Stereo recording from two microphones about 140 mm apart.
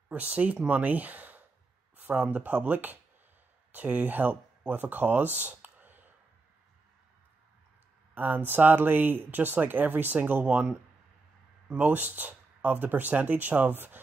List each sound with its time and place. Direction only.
0.1 s speech: 10° right (ahead or behind)
8.1 s speech: 15° right (ahead or behind)